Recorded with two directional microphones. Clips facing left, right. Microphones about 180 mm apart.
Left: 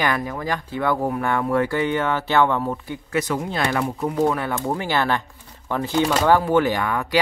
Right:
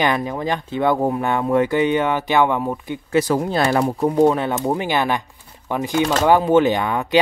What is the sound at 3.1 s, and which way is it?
Speech, 30° right (ahead or behind).